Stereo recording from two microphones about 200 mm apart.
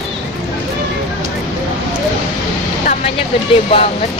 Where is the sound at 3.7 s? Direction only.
30° left (ahead or behind).